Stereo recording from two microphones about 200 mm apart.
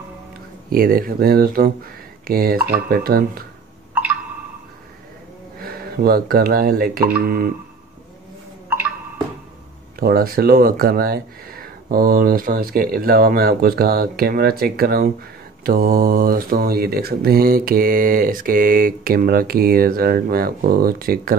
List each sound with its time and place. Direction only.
0.7 s speech: 45° right (ahead or behind)
5.6 s speech: 50° right (ahead or behind)
9.9 s speech: 45° right (ahead or behind)